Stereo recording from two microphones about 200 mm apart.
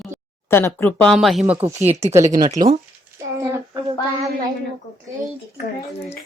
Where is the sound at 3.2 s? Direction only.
15° right (ahead or behind).